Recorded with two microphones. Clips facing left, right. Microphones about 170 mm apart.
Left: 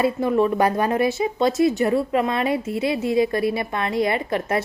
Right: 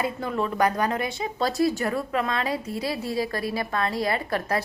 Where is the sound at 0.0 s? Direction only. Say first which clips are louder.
Left 8 dB; 25° left (ahead or behind).